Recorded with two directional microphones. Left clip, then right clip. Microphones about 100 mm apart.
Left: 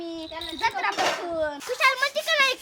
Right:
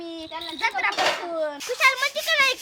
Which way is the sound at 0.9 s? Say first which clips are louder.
Right 2 dB; 30° right (ahead or behind).